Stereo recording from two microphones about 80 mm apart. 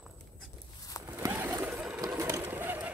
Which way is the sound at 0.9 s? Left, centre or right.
Left.